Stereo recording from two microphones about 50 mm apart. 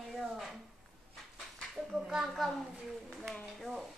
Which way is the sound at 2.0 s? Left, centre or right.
Centre.